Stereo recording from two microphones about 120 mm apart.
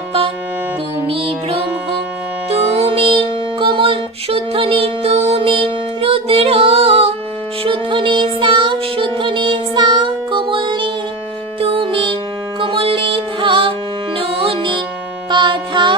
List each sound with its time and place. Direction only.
1.0 s music: 55° right (ahead or behind)
2.7 s music: 55° right (ahead or behind)